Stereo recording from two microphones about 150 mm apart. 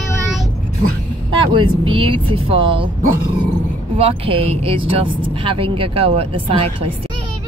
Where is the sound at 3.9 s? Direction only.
40° right (ahead or behind).